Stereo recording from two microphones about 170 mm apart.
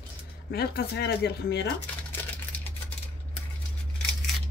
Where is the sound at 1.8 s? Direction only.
5° left (ahead or behind).